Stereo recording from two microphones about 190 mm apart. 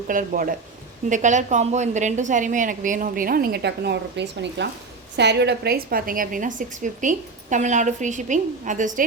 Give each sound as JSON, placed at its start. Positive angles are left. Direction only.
{"t": 0.1, "sound": "a woman's voice", "side_deg": -45}